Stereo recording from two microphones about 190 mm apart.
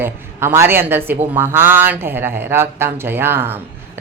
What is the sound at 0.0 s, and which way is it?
A woman's voice, 15° right (ahead or behind).